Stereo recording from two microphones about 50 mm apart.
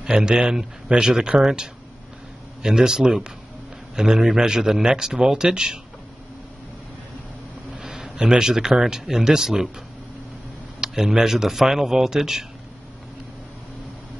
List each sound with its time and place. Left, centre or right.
0.0 s speech: centre
7.7 s speech: centre
10.8 s speech: centre